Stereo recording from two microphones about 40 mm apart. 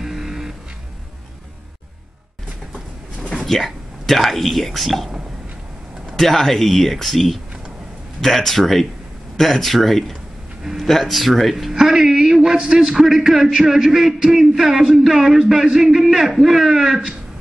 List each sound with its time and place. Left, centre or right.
0.0 s music: centre
3.3 s speech: centre
6.1 s speech: centre
11.7 s speech: centre